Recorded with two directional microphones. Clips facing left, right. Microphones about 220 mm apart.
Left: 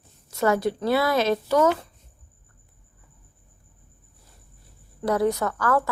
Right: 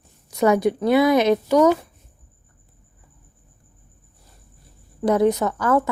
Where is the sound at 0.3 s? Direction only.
15° right (ahead or behind).